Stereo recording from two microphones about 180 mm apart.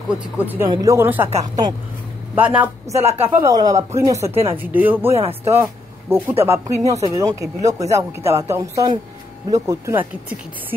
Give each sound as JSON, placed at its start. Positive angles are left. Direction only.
{"t": 0.7, "sound": "speech", "side_deg": -20}
{"t": 2.3, "sound": "speech", "side_deg": -10}
{"t": 2.9, "sound": "a woman's voice", "side_deg": -35}
{"t": 3.3, "sound": "speech", "side_deg": -15}
{"t": 4.3, "sound": "a woman's voice", "side_deg": -35}
{"t": 4.6, "sound": "speech", "side_deg": -10}